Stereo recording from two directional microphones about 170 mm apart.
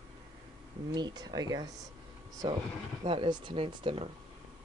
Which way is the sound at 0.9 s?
25° right (ahead or behind).